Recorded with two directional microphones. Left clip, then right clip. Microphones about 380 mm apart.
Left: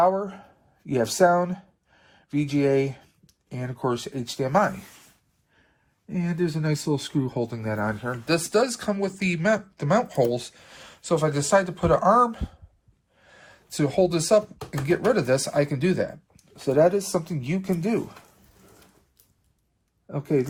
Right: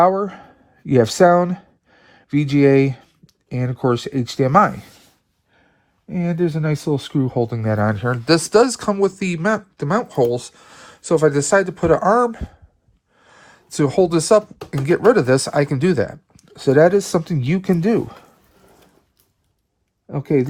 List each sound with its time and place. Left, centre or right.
0.0 s speech: right
6.1 s speech: centre
20.1 s speech: centre